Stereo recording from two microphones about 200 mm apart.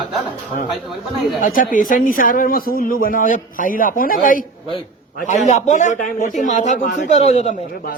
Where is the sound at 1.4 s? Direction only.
45° left (ahead or behind).